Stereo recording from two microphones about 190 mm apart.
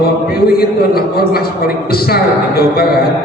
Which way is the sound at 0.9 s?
55° left (ahead or behind).